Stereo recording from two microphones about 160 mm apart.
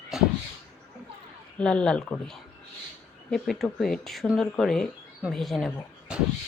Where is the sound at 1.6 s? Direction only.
5° left (ahead or behind).